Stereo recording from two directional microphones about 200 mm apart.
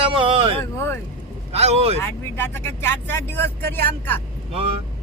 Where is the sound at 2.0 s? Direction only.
10° left (ahead or behind).